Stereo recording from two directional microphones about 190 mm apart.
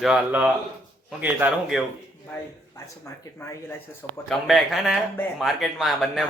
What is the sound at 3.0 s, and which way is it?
Speech, 15° left (ahead or behind).